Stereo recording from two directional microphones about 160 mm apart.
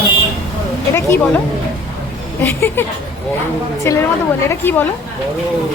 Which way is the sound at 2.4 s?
15° left (ahead or behind).